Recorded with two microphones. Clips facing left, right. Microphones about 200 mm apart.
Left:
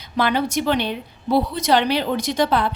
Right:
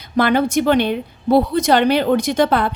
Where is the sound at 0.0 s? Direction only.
50° right (ahead or behind).